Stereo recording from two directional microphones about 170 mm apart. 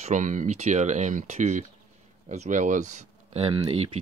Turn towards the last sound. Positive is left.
turn(degrees=-35)  # may be behind; listen again after turning